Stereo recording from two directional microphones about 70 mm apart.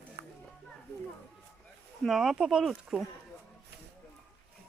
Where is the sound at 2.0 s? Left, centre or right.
Centre.